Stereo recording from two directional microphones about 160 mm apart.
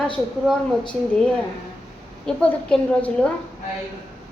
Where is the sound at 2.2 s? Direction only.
5° left (ahead or behind).